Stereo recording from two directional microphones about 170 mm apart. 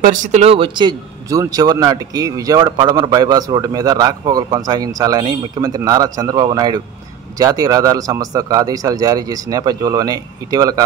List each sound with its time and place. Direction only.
0.0 s speech: 50° right (ahead or behind); by 10.8 s 20° right (ahead or behind)